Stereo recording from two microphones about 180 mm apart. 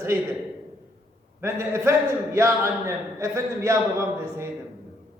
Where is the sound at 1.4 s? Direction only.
15° right (ahead or behind).